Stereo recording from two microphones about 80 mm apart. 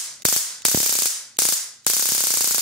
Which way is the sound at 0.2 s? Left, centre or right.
Centre.